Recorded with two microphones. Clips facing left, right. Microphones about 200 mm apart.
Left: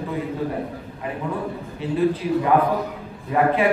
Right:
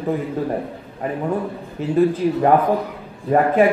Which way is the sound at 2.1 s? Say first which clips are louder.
Right 3 dB; 45° right (ahead or behind).